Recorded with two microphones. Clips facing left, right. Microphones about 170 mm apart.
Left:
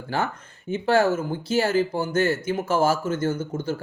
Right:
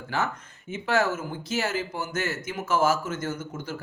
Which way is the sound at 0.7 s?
30° left (ahead or behind).